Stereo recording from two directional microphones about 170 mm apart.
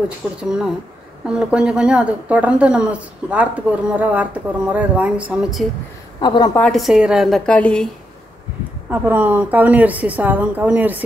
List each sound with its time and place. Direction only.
0.4 s a woman's voice: 5° right (ahead or behind)
6.2 s a woman's voice: 25° left (ahead or behind)
6.5 s a woman's voice: 5° left (ahead or behind)
8.9 s a woman's voice: 10° right (ahead or behind)